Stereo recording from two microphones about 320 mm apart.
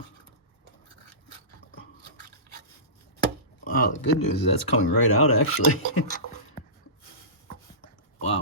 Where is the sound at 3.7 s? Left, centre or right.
Left.